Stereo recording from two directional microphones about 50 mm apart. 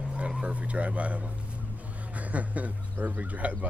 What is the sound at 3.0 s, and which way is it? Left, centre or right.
Bird, right.